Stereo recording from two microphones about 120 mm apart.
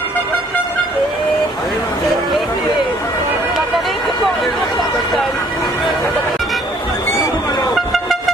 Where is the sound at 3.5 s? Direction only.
Centre (ahead or behind).